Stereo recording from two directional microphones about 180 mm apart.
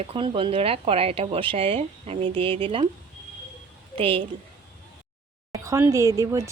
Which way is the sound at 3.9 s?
30° right (ahead or behind).